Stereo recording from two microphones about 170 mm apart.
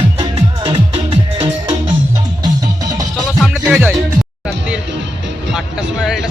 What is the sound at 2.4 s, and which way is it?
Music, 20° right (ahead or behind).